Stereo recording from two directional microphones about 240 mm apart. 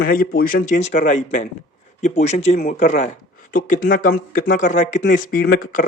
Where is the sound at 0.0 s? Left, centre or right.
Left.